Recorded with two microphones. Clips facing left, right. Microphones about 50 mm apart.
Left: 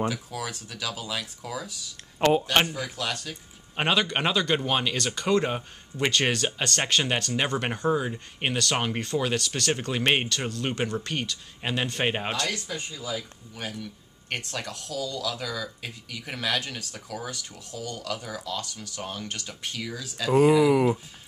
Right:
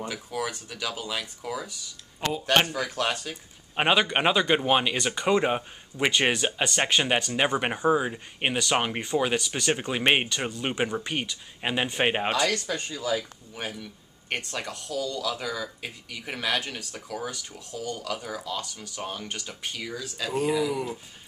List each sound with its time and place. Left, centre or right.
0.1 s speech: centre
2.1 s speech: left
3.2 s speech: centre
12.6 s speech: right
13.6 s speech: centre